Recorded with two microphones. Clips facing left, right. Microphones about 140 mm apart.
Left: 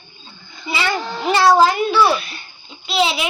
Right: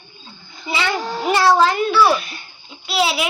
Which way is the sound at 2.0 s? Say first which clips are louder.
Right 2 dB; 40° right (ahead or behind).